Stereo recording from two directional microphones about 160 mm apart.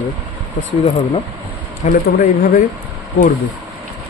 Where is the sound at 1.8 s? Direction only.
70° left (ahead or behind).